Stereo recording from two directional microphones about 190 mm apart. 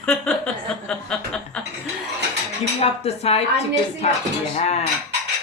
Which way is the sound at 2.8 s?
30° left (ahead or behind).